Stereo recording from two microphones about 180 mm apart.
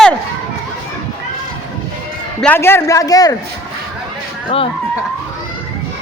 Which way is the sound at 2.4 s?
10° left (ahead or behind).